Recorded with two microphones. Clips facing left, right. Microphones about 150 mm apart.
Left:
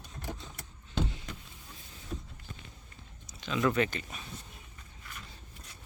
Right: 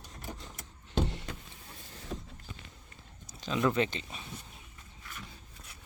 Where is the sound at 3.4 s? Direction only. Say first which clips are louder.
Right 1 dB; 35° right (ahead or behind).